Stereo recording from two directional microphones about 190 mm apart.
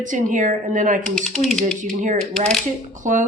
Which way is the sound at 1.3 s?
Centre (ahead or behind).